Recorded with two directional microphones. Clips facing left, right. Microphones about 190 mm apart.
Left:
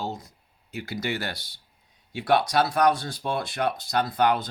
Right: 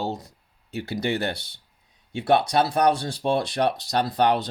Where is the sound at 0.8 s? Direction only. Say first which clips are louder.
Right 4 dB; 25° right (ahead or behind).